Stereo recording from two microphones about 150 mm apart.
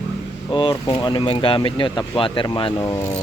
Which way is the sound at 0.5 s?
30° left (ahead or behind).